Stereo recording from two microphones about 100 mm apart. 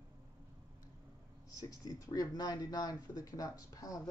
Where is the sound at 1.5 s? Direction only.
35° left (ahead or behind).